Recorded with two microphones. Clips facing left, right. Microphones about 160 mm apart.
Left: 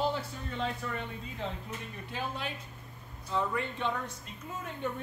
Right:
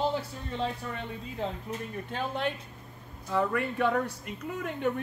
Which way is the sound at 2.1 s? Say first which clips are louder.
Right 6 dB; 55° right (ahead or behind).